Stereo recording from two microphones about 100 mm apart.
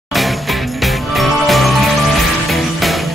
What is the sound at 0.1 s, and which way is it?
Music, centre (ahead or behind).